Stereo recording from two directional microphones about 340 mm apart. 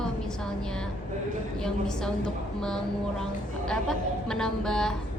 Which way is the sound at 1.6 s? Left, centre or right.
Centre.